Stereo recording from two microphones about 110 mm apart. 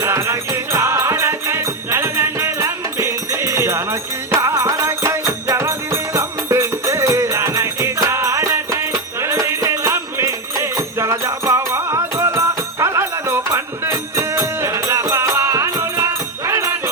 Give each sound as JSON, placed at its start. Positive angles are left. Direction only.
{"t": 0.0, "sound": "music", "side_deg": -25}